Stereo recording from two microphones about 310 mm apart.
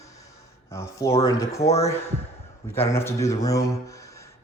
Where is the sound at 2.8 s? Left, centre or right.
Centre.